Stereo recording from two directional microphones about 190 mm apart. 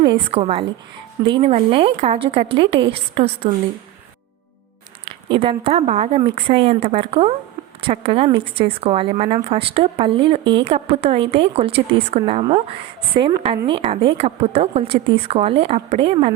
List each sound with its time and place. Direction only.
0.0 s speech: 25° right (ahead or behind)
5.0 s a woman's voice: 25° right (ahead or behind)